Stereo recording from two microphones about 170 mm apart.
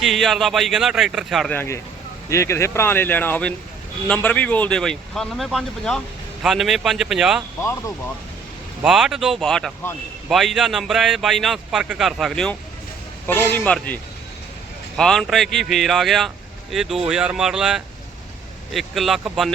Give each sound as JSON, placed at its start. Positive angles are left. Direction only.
{"t": 0.0, "sound": "a man's voice", "side_deg": 0}
{"t": 1.5, "sound": "a man's voice", "side_deg": 15}
{"t": 7.6, "sound": "speech", "side_deg": 15}
{"t": 8.8, "sound": "a man's voice", "side_deg": -5}